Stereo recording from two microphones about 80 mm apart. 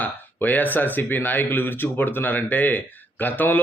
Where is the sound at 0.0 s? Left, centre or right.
Left.